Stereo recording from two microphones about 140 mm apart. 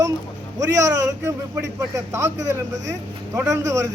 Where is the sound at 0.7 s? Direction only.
20° right (ahead or behind).